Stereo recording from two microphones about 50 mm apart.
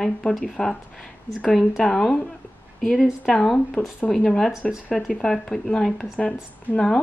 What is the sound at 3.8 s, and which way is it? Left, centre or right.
Speech, left.